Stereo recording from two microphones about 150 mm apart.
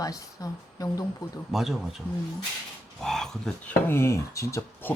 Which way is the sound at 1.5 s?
Centre (ahead or behind).